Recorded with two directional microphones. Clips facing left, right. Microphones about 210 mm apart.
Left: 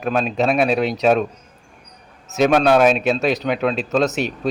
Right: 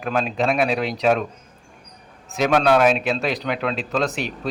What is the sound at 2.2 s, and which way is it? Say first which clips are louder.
Speech: left 3 dB; 20° left (ahead or behind).